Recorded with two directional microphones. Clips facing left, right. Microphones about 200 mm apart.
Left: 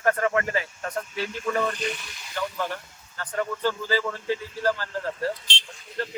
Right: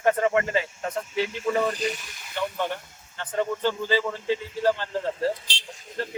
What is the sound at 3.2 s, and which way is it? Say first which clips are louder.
Speech: right 1 dB; 20° right (ahead or behind).